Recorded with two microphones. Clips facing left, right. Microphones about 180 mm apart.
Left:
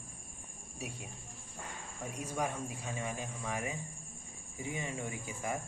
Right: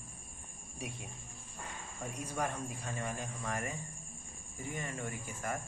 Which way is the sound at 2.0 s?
5° left (ahead or behind).